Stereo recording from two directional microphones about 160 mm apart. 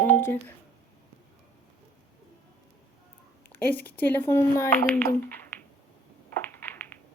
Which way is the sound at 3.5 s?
10° left (ahead or behind).